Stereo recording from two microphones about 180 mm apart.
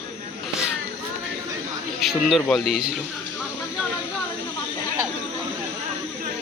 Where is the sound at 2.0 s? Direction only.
Centre (ahead or behind).